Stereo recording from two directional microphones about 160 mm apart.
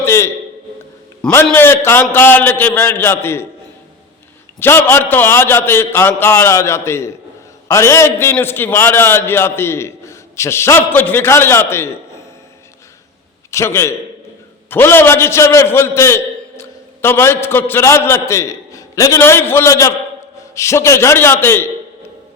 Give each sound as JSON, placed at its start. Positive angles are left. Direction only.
{"t": 0.0, "sound": "a sound", "side_deg": 15}
{"t": 1.2, "sound": "a man's voice", "side_deg": 5}
{"t": 4.6, "sound": "a man's voice", "side_deg": 15}
{"t": 13.5, "sound": "a man's voice", "side_deg": 15}